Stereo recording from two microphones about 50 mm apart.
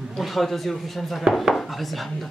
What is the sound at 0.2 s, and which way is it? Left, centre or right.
Speech, centre.